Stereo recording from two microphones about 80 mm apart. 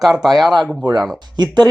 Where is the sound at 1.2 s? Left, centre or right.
Right.